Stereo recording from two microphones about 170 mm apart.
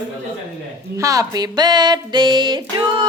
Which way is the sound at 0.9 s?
20° right (ahead or behind).